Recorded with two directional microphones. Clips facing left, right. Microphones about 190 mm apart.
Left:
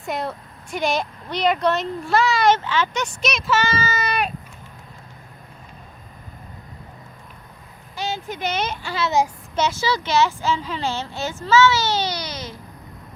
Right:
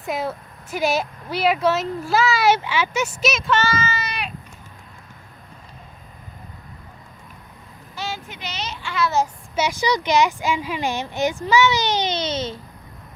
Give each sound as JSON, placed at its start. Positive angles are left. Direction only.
{"t": 0.0, "sound": "speech", "side_deg": 0}
{"t": 3.8, "sound": "a sound", "side_deg": 45}
{"t": 7.9, "sound": "a sound", "side_deg": 20}
{"t": 8.3, "sound": "speech", "side_deg": 50}
{"t": 8.9, "sound": "a child's voice", "side_deg": 25}
{"t": 9.6, "sound": "speech", "side_deg": -15}